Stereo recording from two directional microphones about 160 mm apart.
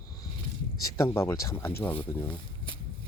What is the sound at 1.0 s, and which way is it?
Speech, 15° left (ahead or behind).